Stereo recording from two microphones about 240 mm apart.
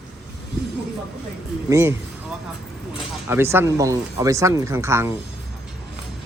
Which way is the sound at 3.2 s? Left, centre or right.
Centre.